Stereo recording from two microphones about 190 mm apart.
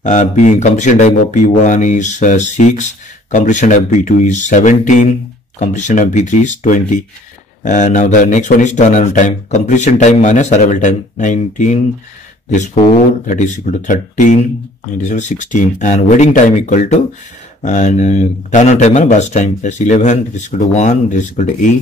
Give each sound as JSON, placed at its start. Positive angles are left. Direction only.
{"t": 0.0, "sound": "speech", "side_deg": 40}